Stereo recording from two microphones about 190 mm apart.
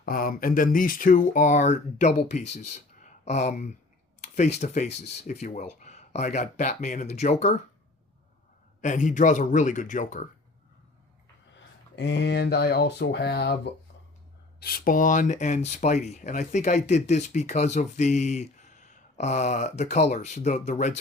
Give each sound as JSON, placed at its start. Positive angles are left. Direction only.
{"t": 0.0, "sound": "speech", "side_deg": 50}
{"t": 8.8, "sound": "speech", "side_deg": 40}
{"t": 11.5, "sound": "speech", "side_deg": 65}
{"t": 14.6, "sound": "speech", "side_deg": 50}